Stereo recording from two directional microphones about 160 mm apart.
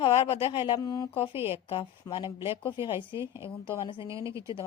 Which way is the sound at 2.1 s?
20° left (ahead or behind).